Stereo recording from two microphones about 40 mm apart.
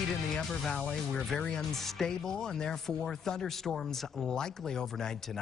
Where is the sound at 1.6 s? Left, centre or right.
Centre.